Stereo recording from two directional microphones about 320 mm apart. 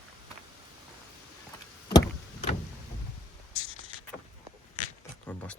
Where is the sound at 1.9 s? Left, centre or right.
Centre.